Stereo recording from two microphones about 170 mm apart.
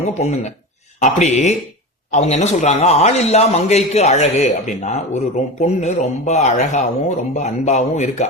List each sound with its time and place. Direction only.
0.0 s a man's voice: 40° left (ahead or behind)